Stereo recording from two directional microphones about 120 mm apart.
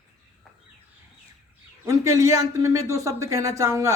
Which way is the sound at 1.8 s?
25° right (ahead or behind).